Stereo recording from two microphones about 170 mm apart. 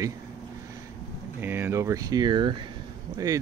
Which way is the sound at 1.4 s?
10° right (ahead or behind).